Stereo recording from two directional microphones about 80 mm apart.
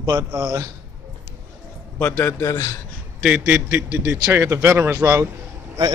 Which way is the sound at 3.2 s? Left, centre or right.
Centre.